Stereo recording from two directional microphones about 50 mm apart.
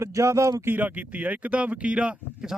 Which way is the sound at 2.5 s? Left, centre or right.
Centre.